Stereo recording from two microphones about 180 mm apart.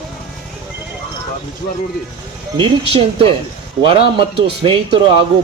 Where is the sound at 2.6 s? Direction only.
30° right (ahead or behind).